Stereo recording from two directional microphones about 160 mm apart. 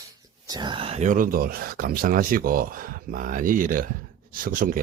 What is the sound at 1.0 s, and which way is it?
Speech, 55° right (ahead or behind).